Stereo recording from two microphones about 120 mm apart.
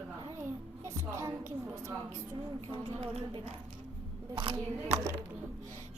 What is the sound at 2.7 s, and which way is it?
Speech, 50° right (ahead or behind).